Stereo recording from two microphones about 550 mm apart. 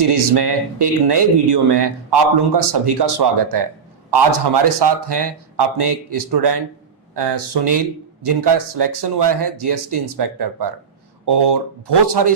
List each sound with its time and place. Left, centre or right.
0.0 s speech: right